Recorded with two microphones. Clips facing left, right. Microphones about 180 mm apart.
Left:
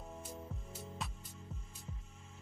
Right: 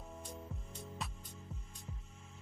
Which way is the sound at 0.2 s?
5° left (ahead or behind).